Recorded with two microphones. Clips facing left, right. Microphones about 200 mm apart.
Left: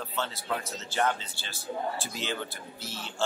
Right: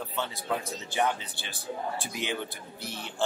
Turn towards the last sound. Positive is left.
turn(degrees=-15)  # may be behind; listen again after turning